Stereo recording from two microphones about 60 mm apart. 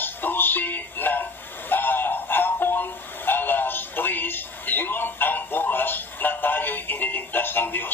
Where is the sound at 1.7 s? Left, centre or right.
Left.